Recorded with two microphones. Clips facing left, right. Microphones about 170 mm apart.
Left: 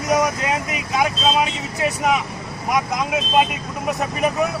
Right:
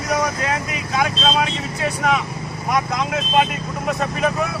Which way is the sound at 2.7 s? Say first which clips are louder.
Even; 15° left (ahead or behind).